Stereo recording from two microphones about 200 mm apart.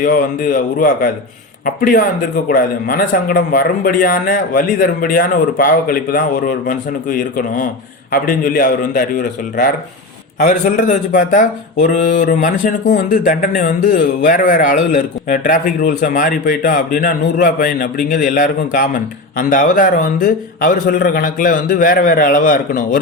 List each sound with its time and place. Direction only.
0.0 s speech: 40° left (ahead or behind)